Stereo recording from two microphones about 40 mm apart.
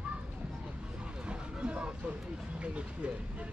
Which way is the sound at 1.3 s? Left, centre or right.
Right.